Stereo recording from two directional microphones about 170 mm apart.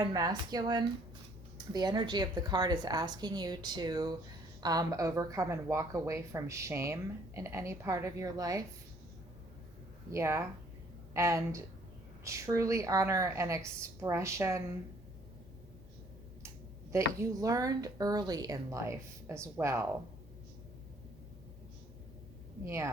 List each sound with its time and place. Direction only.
0.1 s a woman's voice: 25° right (ahead or behind)
10.1 s a woman's voice: 15° right (ahead or behind)
16.9 s a woman's voice: 20° right (ahead or behind)
22.6 s a woman's voice: 15° right (ahead or behind)